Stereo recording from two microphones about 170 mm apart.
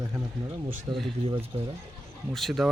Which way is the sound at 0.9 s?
25° right (ahead or behind).